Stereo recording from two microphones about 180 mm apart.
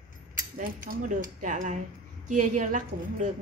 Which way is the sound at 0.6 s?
45° right (ahead or behind).